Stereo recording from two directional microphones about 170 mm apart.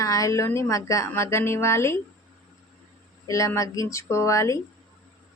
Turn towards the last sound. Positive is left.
turn(degrees=20)  # may be behind; listen again after turning